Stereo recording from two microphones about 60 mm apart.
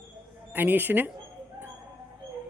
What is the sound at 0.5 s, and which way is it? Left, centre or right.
Speech, right.